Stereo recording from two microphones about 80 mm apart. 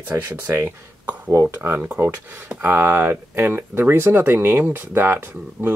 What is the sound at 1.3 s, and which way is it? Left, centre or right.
Speech, right.